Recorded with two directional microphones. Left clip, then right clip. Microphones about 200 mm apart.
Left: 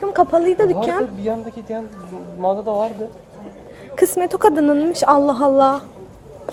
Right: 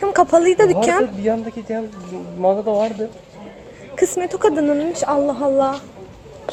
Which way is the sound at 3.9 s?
15° left (ahead or behind).